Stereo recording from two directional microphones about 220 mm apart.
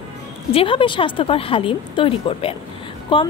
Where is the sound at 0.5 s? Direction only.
25° left (ahead or behind).